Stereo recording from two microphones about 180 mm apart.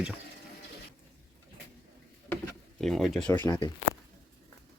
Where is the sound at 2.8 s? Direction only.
Centre (ahead or behind).